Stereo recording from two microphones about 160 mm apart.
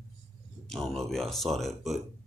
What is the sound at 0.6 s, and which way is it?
Speech, 5° left (ahead or behind).